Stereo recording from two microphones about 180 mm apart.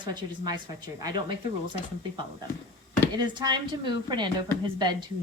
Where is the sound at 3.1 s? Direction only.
25° right (ahead or behind).